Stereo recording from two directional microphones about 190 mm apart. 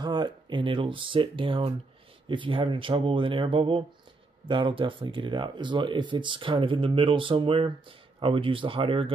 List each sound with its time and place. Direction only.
0.0 s speech: 25° right (ahead or behind)